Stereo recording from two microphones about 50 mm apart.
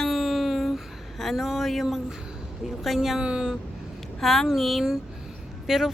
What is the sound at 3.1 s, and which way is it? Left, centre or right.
Speech, centre.